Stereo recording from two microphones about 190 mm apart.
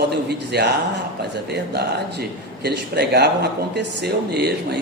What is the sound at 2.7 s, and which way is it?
Speech, 60° right (ahead or behind).